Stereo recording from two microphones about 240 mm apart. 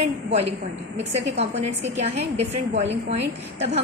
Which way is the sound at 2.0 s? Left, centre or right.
Right.